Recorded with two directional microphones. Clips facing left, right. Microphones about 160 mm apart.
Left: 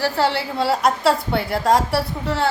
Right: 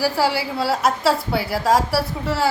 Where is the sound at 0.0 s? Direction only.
5° right (ahead or behind).